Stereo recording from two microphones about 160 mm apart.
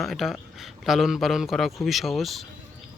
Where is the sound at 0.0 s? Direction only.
Centre (ahead or behind).